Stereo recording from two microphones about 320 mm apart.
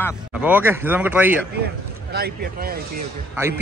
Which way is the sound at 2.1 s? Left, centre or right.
Right.